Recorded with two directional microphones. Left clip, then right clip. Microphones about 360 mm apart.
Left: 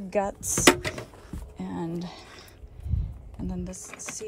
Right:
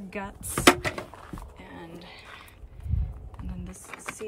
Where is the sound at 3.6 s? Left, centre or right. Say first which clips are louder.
Even; centre.